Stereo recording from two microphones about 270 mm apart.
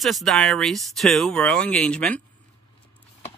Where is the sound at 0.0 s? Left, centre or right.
Centre.